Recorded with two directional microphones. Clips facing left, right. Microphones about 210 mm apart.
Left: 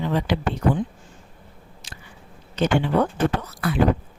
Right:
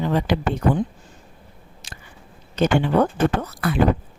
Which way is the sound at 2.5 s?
45° right (ahead or behind).